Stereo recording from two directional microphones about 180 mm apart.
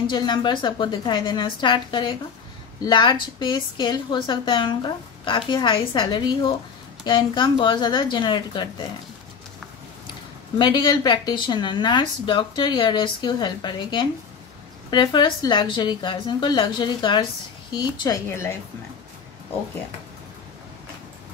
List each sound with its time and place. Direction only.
0.0 s speech: 25° left (ahead or behind)
10.6 s a woman's voice: 25° left (ahead or behind)